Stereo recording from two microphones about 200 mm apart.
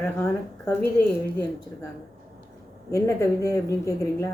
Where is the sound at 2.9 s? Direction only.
15° left (ahead or behind).